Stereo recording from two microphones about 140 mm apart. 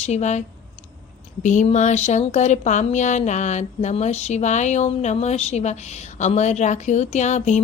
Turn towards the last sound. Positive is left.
turn(degrees=55)  # may be behind; listen again after turning